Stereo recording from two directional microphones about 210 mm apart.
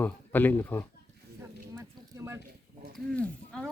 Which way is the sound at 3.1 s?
5° left (ahead or behind).